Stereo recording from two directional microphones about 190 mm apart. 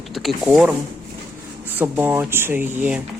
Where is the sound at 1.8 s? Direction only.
10° right (ahead or behind).